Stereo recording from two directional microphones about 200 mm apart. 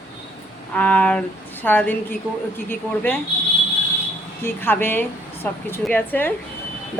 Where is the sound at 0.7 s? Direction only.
10° left (ahead or behind).